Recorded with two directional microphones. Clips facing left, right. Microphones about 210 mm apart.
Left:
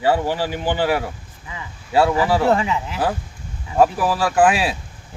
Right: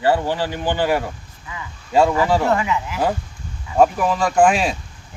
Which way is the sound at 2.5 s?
30° left (ahead or behind).